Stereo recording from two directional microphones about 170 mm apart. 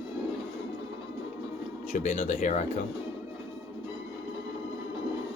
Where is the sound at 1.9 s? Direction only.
45° left (ahead or behind).